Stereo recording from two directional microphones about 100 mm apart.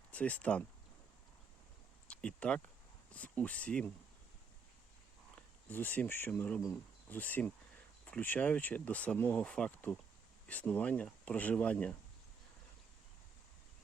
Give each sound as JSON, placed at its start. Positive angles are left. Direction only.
{"t": 0.1, "sound": "speech", "side_deg": 15}
{"t": 2.0, "sound": "speech", "side_deg": 10}
{"t": 5.6, "sound": "speech", "side_deg": 15}